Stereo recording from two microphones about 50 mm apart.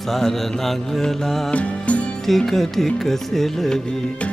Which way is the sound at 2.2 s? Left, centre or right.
Centre.